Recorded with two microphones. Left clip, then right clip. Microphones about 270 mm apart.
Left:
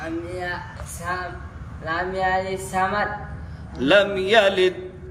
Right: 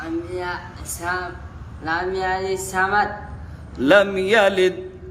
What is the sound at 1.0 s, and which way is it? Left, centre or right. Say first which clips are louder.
Speech: right 3 dB; right.